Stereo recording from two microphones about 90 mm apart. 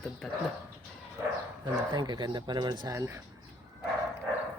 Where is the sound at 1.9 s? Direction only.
55° right (ahead or behind).